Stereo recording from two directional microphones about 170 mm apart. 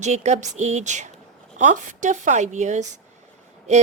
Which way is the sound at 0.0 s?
40° right (ahead or behind).